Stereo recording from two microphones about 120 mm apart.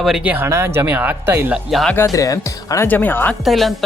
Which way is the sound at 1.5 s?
Centre (ahead or behind).